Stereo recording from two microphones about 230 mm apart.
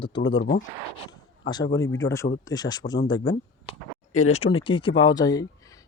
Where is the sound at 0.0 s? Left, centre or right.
Centre.